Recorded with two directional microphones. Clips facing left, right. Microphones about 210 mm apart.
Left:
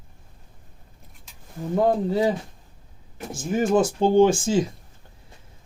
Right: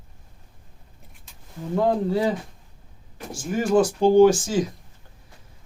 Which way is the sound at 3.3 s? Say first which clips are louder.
Even; 20° left (ahead or behind).